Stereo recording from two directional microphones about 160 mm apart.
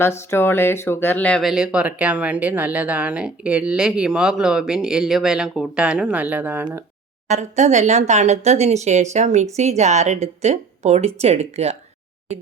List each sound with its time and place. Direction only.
0.0 s speech: 15° left (ahead or behind); by 6.7 s 10° right (ahead or behind)
7.3 s a woman's voice: 45° right (ahead or behind)